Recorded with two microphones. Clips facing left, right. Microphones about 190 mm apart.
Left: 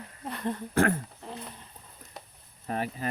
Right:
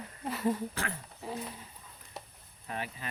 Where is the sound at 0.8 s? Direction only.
55° left (ahead or behind).